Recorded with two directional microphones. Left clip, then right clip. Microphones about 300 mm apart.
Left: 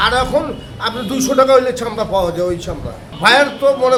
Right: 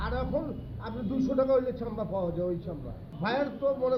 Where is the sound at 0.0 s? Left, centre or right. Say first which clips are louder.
Left 18 dB; left.